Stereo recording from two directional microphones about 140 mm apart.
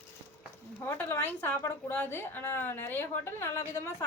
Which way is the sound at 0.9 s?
15° left (ahead or behind).